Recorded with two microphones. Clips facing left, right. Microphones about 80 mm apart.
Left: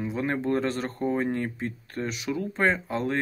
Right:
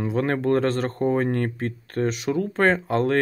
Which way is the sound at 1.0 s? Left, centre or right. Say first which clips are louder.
Right 4 dB; right.